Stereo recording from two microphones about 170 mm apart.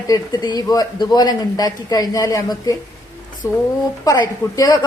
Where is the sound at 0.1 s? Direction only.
20° left (ahead or behind).